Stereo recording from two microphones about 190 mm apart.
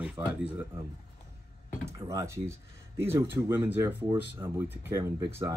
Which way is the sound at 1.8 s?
15° right (ahead or behind).